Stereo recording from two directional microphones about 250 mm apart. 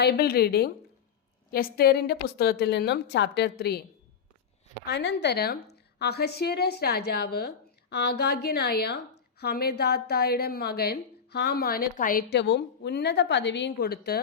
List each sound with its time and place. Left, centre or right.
0.0 s a woman's voice: left
4.9 s a woman's voice: left